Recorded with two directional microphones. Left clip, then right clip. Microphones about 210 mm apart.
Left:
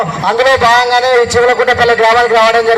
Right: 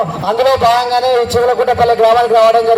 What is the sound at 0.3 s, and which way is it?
A man's voice, 55° right (ahead or behind).